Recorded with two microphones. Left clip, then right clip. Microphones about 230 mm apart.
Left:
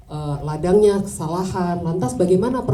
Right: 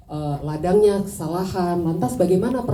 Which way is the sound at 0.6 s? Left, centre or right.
Left.